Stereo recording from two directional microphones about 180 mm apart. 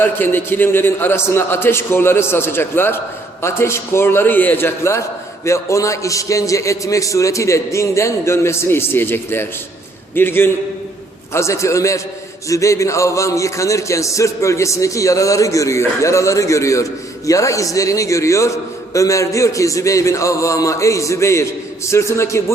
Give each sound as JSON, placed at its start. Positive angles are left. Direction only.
{"t": 0.0, "sound": "speech", "side_deg": 10}